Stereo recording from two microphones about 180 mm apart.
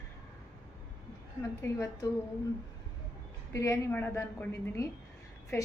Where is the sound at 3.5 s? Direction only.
15° left (ahead or behind).